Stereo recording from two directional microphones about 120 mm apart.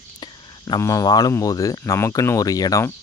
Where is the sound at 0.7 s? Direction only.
25° left (ahead or behind).